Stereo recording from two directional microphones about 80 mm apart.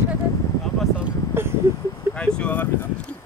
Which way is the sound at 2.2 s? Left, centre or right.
Centre.